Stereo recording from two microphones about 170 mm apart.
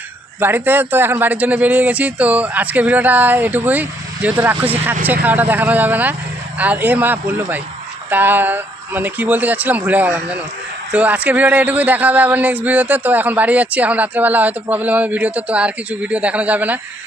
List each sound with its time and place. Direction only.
0.3 s a man's voice: 10° right (ahead or behind)